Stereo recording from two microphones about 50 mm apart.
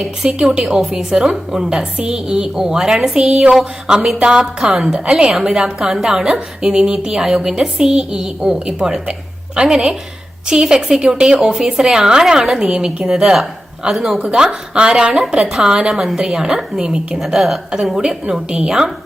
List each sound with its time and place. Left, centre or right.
0.2 s a woman's voice: centre
14.2 s a woman's voice: centre
17.2 s a woman's voice: centre